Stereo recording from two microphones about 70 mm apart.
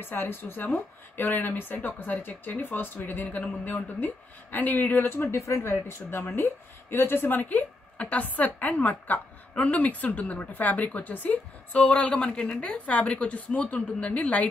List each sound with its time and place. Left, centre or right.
0.0 s a woman's voice: left